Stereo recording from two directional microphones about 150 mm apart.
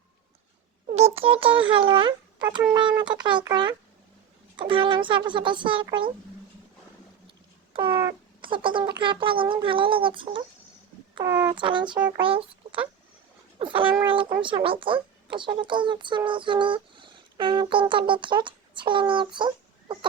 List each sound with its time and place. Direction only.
0.9 s a child's voice: 45° right (ahead or behind)
7.7 s cat: 35° right (ahead or behind)
8.4 s speech: 35° right (ahead or behind)
11.2 s speech: 20° right (ahead or behind)
11.5 s speech: 30° right (ahead or behind)